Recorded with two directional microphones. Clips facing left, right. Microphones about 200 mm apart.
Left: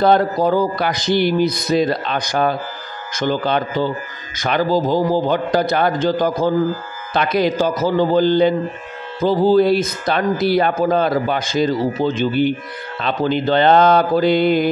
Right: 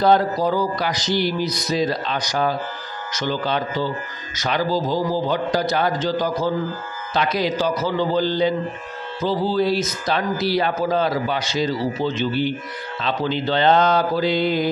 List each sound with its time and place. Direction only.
0.0 s speech: 55° left (ahead or behind)